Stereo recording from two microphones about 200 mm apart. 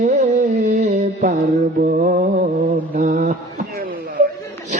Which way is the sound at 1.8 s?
45° right (ahead or behind).